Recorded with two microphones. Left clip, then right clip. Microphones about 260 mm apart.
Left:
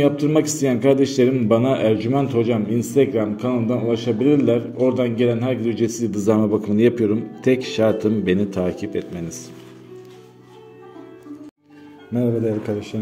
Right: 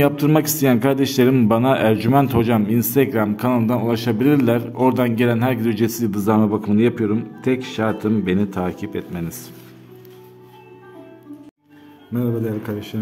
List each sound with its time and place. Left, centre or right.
0.0 s a man's voice: right
12.1 s a man's voice: centre